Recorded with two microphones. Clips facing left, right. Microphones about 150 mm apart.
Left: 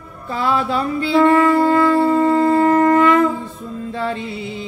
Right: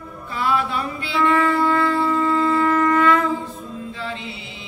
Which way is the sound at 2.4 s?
45° left (ahead or behind).